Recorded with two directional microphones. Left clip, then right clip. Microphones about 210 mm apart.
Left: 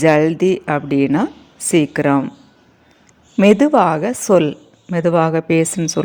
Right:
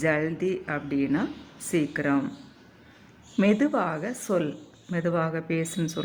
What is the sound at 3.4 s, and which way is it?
A woman's voice, 30° left (ahead or behind).